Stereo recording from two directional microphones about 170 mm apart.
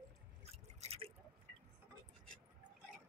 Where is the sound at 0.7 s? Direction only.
40° right (ahead or behind).